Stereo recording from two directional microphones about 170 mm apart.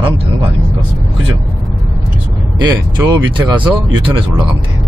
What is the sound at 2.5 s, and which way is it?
Speech, 25° right (ahead or behind).